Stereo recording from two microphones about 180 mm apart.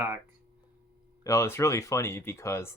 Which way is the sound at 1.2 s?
15° left (ahead or behind).